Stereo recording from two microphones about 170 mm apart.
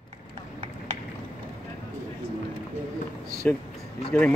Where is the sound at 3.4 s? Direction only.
5° left (ahead or behind).